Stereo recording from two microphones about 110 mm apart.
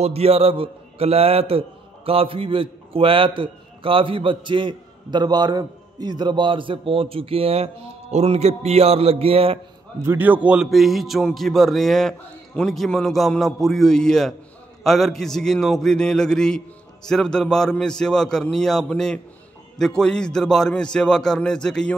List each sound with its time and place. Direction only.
0.0 s a man's voice: 65° right (ahead or behind)
10.0 s a man's voice: 15° right (ahead or behind); by 21.9 s 5° left (ahead or behind)